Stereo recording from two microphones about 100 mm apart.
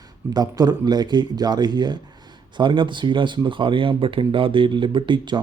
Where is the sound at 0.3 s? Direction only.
40° right (ahead or behind).